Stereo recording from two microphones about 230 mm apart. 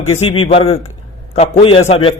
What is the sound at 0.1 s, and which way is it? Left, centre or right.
A man's voice, left.